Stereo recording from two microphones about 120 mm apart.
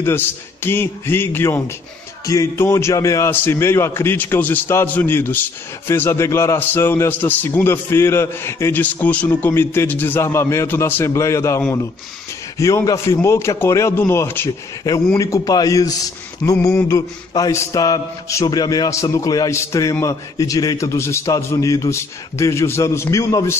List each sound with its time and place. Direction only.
0.0 s a man's voice: 20° left (ahead or behind)